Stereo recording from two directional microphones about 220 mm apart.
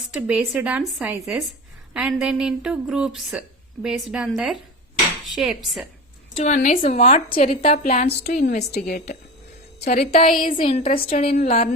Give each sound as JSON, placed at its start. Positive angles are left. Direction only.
{"t": 0.3, "sound": "speech", "side_deg": -5}
{"t": 5.2, "sound": "dishes", "side_deg": 0}
{"t": 6.3, "sound": "a woman's voice", "side_deg": 35}
{"t": 7.4, "sound": "a woman's voice", "side_deg": 40}
{"t": 8.2, "sound": "a woman's voice", "side_deg": 45}
{"t": 11.2, "sound": "a woman's voice", "side_deg": 40}